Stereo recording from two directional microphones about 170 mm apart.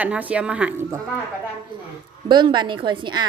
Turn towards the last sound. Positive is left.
turn(degrees=-25)  # may be behind; listen again after turning